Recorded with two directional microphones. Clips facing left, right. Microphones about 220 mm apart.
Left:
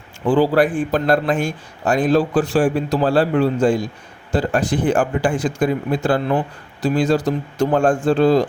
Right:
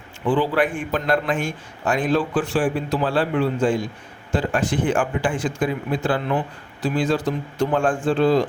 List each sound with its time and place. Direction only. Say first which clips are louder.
0.3 s a man's voice: left 5 dB; 40° left (ahead or behind)